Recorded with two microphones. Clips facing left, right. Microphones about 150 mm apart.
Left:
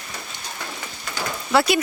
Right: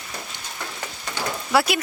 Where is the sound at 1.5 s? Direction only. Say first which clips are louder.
Left 2 dB; 5° right (ahead or behind).